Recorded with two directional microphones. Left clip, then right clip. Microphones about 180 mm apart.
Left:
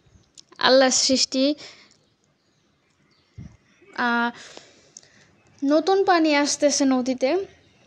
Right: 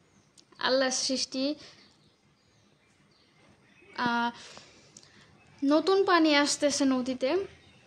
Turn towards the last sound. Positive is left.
turn(degrees=25)  # may be behind; listen again after turning